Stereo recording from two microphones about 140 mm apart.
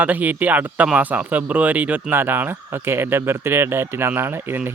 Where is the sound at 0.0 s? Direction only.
10° right (ahead or behind).